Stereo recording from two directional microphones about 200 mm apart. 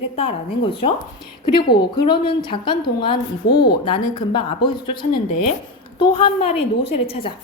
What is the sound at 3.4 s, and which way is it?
Speech, 55° left (ahead or behind).